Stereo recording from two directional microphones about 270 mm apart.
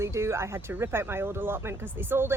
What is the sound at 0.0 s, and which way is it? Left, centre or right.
Speech, centre.